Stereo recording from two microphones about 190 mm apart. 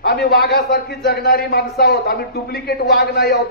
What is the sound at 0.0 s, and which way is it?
Speech, 55° left (ahead or behind).